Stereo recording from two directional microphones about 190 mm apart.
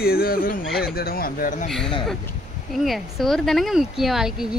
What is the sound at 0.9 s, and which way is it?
Speech, 50° left (ahead or behind).